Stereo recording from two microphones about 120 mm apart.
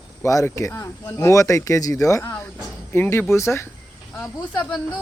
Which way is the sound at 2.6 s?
20° left (ahead or behind).